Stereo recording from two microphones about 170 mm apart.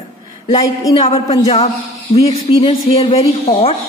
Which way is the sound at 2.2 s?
30° left (ahead or behind).